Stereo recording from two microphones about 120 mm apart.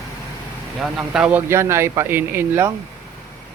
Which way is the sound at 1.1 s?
10° right (ahead or behind).